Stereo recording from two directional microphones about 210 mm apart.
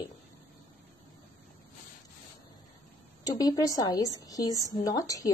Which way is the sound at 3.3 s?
15° left (ahead or behind).